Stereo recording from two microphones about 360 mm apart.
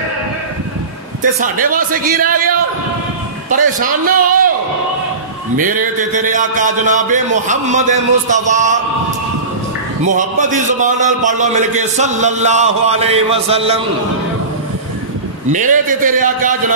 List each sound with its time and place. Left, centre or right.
1.2 s a man's voice: right
5.6 s a man's voice: right
10.0 s a man's voice: right
15.5 s a man's voice: right